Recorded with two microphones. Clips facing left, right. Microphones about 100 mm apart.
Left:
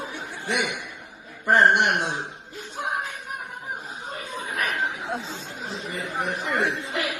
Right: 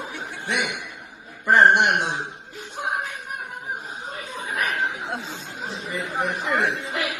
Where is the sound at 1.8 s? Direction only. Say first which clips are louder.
Right 2 dB; 30° right (ahead or behind).